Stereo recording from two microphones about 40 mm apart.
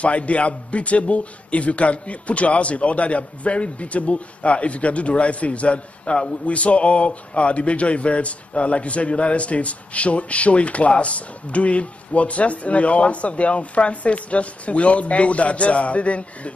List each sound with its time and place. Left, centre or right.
0.0 s a man's voice: left